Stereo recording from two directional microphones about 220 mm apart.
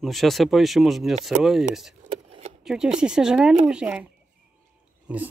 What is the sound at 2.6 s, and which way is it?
Speech, 5° right (ahead or behind).